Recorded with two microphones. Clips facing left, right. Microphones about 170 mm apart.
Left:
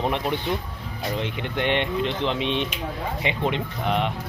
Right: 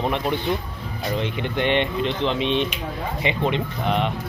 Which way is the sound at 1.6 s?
10° left (ahead or behind).